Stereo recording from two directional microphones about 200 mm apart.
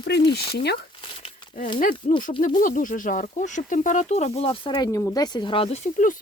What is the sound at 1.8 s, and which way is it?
Speech, 45° left (ahead or behind).